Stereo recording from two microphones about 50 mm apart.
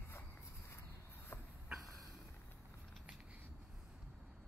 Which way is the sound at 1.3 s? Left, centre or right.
Left.